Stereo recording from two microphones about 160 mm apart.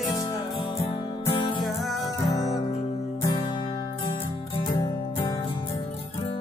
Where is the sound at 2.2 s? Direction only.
20° left (ahead or behind).